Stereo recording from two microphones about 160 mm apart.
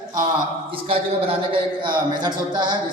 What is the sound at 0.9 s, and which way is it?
Speech, 35° right (ahead or behind).